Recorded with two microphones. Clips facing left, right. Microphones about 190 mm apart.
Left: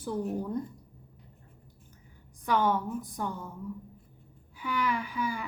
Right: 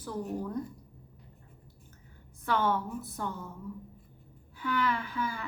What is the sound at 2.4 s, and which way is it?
A woman's voice, 15° left (ahead or behind).